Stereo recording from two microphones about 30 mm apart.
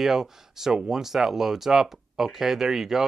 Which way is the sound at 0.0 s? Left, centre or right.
Centre.